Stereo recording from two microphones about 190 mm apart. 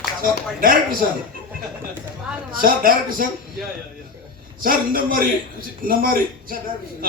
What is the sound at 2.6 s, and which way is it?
Speech, 50° right (ahead or behind).